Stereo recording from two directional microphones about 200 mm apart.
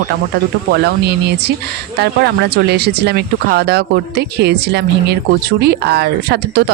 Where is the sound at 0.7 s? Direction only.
55° right (ahead or behind).